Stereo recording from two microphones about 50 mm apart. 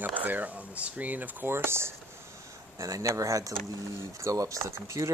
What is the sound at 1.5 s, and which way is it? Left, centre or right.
Speech, right.